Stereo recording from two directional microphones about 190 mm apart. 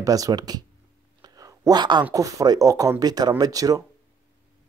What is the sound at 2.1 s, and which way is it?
Speech, 20° right (ahead or behind).